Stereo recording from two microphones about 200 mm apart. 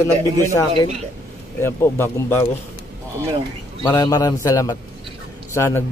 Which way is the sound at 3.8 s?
20° left (ahead or behind).